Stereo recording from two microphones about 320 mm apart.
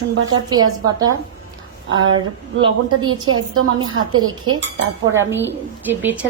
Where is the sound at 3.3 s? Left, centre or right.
Right.